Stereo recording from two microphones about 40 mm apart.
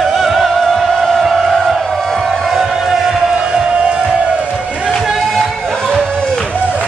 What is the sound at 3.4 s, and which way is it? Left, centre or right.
Music, right.